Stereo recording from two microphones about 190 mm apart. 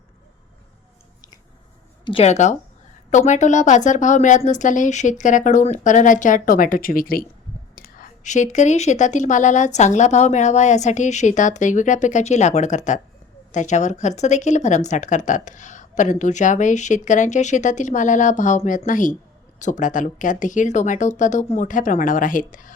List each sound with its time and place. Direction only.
2.0 s speech: 30° left (ahead or behind)